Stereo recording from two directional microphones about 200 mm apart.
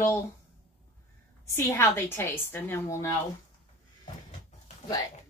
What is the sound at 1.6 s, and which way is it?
Speech, 10° left (ahead or behind).